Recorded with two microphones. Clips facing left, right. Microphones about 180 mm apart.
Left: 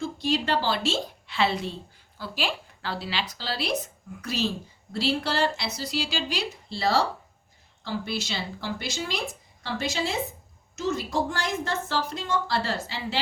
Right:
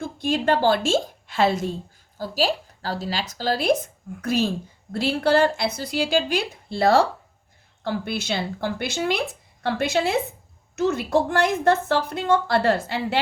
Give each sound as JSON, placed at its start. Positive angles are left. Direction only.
{"t": 0.0, "sound": "a woman's voice", "side_deg": -50}